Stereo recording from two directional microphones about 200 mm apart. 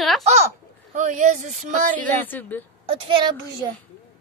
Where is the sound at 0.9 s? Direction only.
35° right (ahead or behind).